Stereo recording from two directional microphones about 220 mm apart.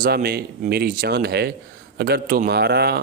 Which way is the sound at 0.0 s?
45° right (ahead or behind).